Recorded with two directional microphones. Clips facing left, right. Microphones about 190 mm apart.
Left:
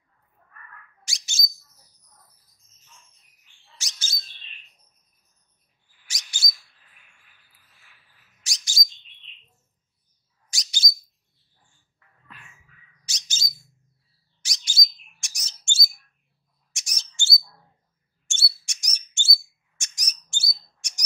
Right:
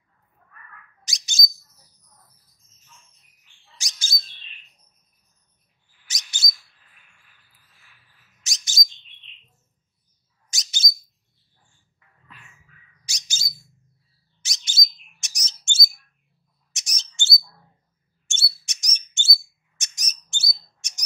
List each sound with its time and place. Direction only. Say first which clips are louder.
1.0 s bird: right 6 dB; 20° right (ahead or behind)
3.7 s bird: right 3 dB; 15° right (ahead or behind)
6.0 s bird: right 1 dB; 20° right (ahead or behind)
8.4 s bird: right 1 dB; 20° right (ahead or behind)
10.5 s bird: even; 25° right (ahead or behind)
13.0 s bird: even; 10° right (ahead or behind)
14.4 s bird: right 1 dB; 20° right (ahead or behind)